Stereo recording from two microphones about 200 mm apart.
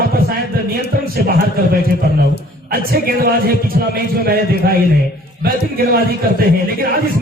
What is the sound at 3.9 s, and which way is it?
A man's voice, 50° right (ahead or behind).